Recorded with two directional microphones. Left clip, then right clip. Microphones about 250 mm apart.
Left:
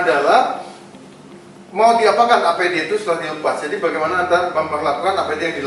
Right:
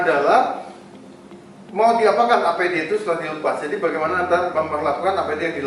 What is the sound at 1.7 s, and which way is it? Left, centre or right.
A man's voice, centre.